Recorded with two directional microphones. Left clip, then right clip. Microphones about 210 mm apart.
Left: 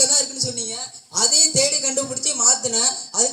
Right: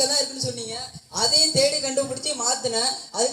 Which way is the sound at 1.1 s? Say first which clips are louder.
Left 1 dB; 55° left (ahead or behind).